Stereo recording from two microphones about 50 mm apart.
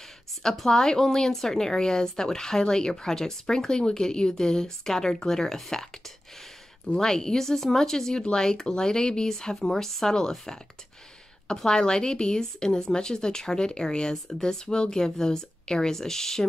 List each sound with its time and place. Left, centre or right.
0.4 s a woman's voice: centre
7.0 s a woman's voice: centre